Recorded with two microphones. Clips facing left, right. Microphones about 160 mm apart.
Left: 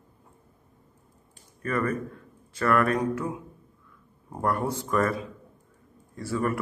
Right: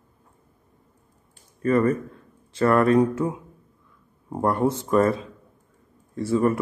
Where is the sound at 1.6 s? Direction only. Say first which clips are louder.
Right 7 dB; 30° right (ahead or behind).